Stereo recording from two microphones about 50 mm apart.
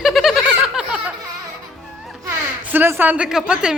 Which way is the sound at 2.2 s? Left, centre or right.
Right.